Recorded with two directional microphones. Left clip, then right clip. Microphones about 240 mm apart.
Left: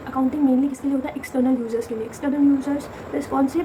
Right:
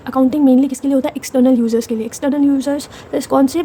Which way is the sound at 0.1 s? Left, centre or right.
Right.